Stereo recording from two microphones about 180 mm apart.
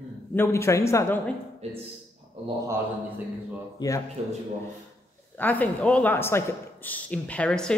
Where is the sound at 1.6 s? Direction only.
35° right (ahead or behind).